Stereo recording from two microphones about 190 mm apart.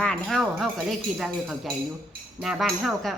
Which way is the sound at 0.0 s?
5° left (ahead or behind).